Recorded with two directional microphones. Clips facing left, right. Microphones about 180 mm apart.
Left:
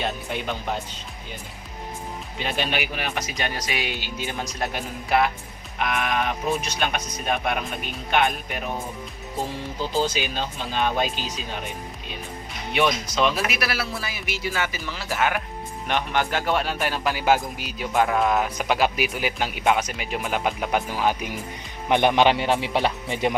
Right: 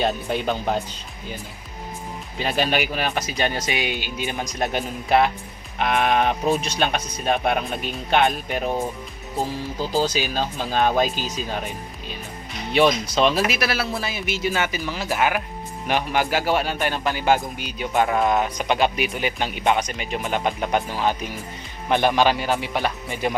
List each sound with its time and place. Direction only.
0.0 s speech: 35° right (ahead or behind)
2.4 s speech: 40° right (ahead or behind)
9.9 s speech: 40° right (ahead or behind)
12.7 s a man's voice: 30° right (ahead or behind); by 23.3 s 25° left (ahead or behind)